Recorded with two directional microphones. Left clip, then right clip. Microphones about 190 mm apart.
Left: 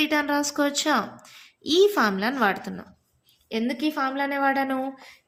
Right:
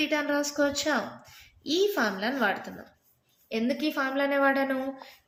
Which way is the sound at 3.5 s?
25° left (ahead or behind).